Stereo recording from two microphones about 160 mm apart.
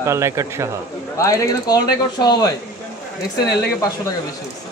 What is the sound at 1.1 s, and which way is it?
A man's voice, 20° left (ahead or behind).